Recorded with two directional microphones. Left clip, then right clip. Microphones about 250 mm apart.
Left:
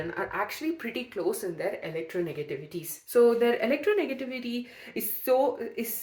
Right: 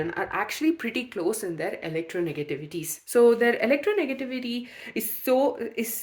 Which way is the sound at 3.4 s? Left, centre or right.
Right.